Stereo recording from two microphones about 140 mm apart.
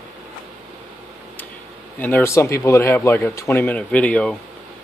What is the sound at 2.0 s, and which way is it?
Speech, 15° left (ahead or behind).